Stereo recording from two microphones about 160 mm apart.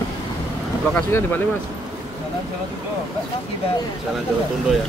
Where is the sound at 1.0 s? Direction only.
15° left (ahead or behind).